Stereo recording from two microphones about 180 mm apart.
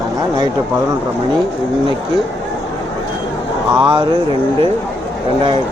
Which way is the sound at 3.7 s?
25° right (ahead or behind).